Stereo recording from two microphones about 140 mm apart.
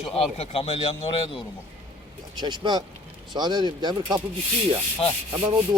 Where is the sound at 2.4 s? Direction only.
30° right (ahead or behind).